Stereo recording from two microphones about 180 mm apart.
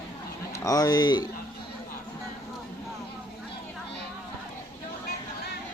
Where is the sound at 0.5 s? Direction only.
20° left (ahead or behind).